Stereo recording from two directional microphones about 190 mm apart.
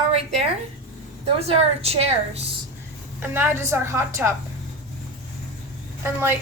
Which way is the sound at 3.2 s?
10° right (ahead or behind).